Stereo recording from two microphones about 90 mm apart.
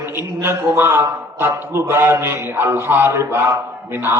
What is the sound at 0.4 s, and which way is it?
A man's voice, 25° right (ahead or behind).